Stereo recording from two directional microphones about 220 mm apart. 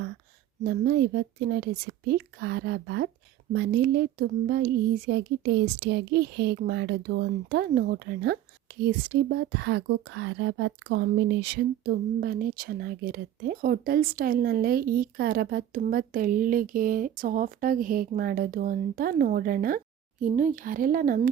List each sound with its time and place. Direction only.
0.6 s speech: 45° right (ahead or behind)